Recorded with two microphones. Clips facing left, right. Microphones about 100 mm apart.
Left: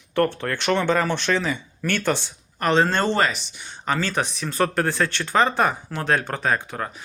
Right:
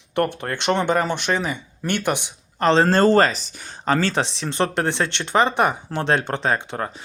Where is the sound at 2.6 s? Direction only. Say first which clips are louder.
Right 4 dB; 35° right (ahead or behind).